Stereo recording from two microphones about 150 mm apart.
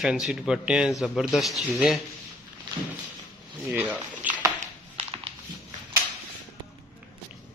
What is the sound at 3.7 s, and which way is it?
Speech, 10° right (ahead or behind).